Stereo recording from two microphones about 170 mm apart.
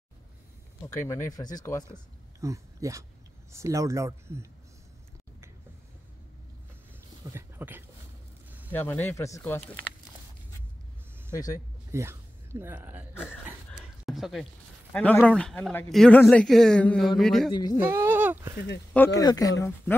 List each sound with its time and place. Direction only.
0.8 s speech: 15° left (ahead or behind)
2.4 s speech: 20° right (ahead or behind)
7.2 s speech: 15° right (ahead or behind)
8.5 s a sound: 10° right (ahead or behind)
8.7 s speech: 10° left (ahead or behind)
11.3 s speech: 20° left (ahead or behind)
11.9 s speech: 15° right (ahead or behind)
13.1 s speech: 15° left (ahead or behind)
13.5 s dog: centre (ahead or behind)
14.9 s speech: 10° left (ahead or behind)
17.5 s speech: 25° left (ahead or behind)
17.7 s speech: 15° right (ahead or behind)
19.1 s speech: 20° left (ahead or behind)